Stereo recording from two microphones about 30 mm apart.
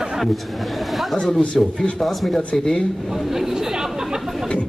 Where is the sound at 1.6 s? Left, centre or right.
Centre.